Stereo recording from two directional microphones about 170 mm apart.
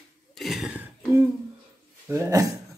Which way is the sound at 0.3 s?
Centre (ahead or behind).